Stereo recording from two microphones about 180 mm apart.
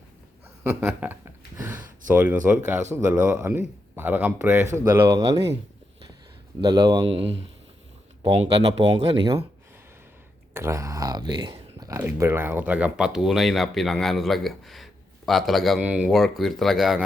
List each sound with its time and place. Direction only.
0.6 s speech: 15° right (ahead or behind)
6.6 s speech: 25° right (ahead or behind)
9.0 s speech: 25° right (ahead or behind)
10.5 s speech: 15° right (ahead or behind)